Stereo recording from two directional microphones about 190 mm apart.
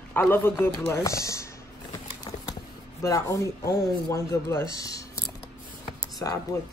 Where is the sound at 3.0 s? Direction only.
15° left (ahead or behind).